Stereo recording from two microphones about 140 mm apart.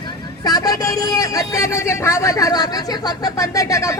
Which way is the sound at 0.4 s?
25° left (ahead or behind).